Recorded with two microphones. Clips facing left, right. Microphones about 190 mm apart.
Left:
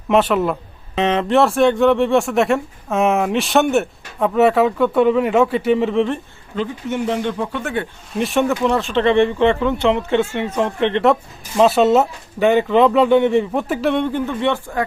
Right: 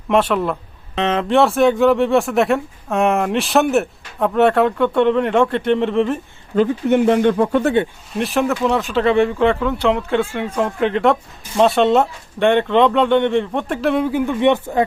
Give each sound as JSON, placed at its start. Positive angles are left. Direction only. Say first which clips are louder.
{"t": 0.1, "sound": "speech", "louder": "left 1 dB", "side_deg": 5}
{"t": 6.6, "sound": "speech", "louder": "right 7 dB", "side_deg": -60}
{"t": 8.1, "sound": "speech", "louder": "left 1 dB", "side_deg": 0}